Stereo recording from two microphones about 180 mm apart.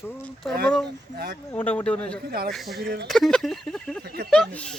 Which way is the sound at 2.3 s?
60° right (ahead or behind).